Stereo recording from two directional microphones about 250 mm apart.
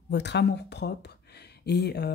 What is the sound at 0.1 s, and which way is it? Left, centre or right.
A woman's voice, left.